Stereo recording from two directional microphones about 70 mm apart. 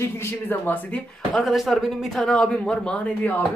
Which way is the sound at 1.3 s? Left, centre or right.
Centre.